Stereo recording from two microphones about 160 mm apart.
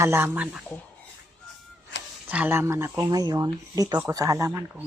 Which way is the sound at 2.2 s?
10° right (ahead or behind).